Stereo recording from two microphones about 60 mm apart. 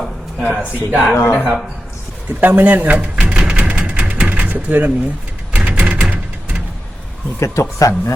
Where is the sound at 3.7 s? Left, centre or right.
Centre.